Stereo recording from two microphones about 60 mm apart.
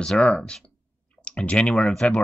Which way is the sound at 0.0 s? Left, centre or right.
Centre.